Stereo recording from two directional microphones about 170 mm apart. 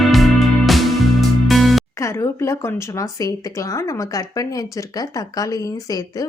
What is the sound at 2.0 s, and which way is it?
Speech, 15° left (ahead or behind).